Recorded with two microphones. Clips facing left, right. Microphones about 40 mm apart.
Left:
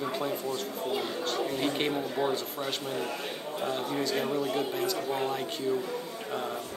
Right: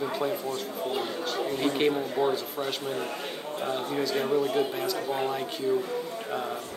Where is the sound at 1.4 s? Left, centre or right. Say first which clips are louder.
Right 5 dB; centre.